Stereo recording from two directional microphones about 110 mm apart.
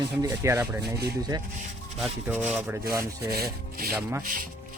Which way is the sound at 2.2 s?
15° right (ahead or behind).